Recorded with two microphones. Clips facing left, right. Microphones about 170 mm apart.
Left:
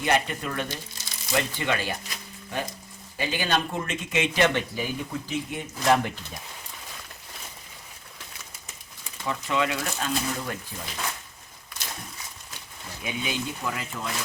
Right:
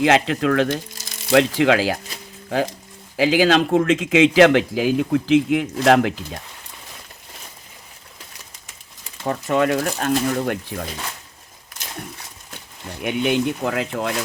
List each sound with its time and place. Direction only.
0.0 s speech: 90° right
3.2 s speech: 90° right
9.2 s speech: 45° right (ahead or behind); by 10.8 s 65° right (ahead or behind)
13.0 s speech: 65° right (ahead or behind)